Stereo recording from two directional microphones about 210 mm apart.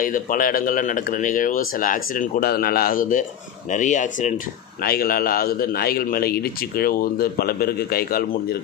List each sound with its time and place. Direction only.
0.0 s a man's voice: 40° left (ahead or behind)